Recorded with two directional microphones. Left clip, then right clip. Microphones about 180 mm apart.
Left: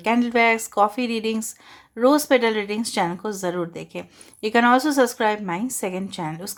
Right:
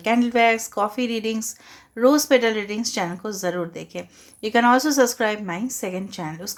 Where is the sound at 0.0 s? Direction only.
25° left (ahead or behind).